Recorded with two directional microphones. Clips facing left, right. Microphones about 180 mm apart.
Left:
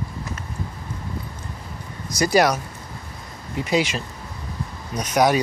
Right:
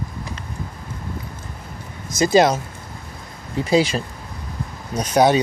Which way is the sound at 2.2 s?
25° right (ahead or behind).